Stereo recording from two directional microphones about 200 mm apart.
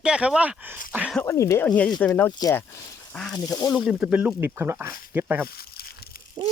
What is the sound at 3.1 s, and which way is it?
Speech, 5° left (ahead or behind).